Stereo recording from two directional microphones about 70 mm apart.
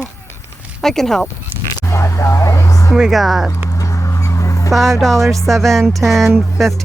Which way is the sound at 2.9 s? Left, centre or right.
Centre.